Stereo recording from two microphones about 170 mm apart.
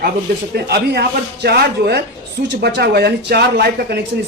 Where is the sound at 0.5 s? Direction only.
75° right (ahead or behind).